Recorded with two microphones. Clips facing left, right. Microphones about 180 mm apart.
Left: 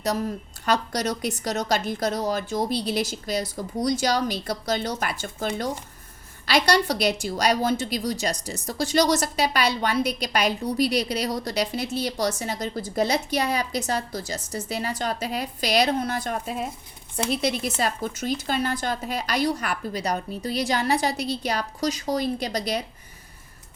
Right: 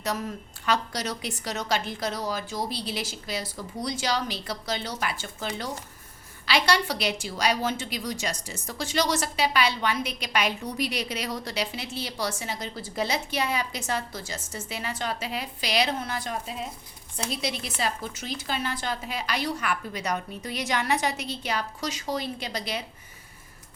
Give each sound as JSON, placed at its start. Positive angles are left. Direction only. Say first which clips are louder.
{"t": 0.0, "sound": "a woman's voice", "louder": "left 5 dB", "side_deg": 35}